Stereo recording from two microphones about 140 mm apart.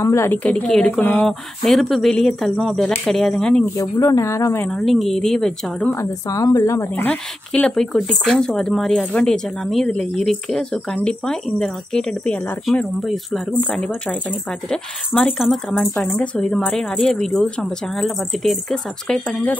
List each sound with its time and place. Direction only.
0.0 s speech: 20° left (ahead or behind)
0.4 s a woman's voice: 5° left (ahead or behind)
1.6 s speech: centre (ahead or behind)
3.7 s speech: 25° left (ahead or behind)
4.6 s speech: centre (ahead or behind)
5.9 s a woman's voice: 25° left (ahead or behind); by 19.5 s 5° left (ahead or behind)